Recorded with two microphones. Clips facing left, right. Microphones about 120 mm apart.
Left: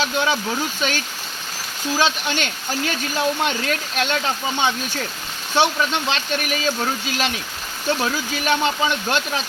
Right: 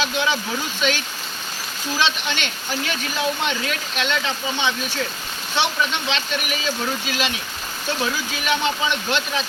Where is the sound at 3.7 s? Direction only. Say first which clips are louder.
Left 2 dB; 45° left (ahead or behind).